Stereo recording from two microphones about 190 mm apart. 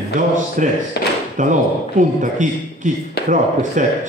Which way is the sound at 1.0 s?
60° left (ahead or behind).